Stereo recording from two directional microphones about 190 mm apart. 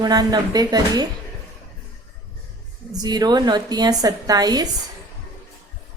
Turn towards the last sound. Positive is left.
turn(degrees=-20)  # may be behind; listen again after turning